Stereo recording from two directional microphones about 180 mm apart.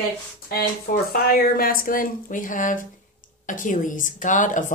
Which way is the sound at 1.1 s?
55° left (ahead or behind).